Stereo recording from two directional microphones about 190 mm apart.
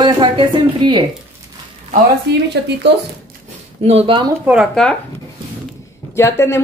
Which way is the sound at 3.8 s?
35° right (ahead or behind).